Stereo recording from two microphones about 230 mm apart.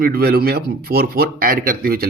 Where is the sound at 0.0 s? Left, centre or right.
Right.